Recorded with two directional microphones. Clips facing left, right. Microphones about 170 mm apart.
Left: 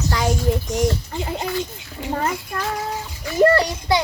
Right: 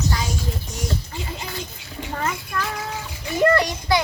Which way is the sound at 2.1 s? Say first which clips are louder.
Left 2 dB; 35° left (ahead or behind).